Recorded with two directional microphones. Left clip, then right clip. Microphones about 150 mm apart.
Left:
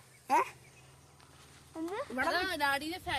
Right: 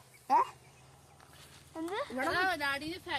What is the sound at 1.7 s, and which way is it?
Speech, 10° right (ahead or behind).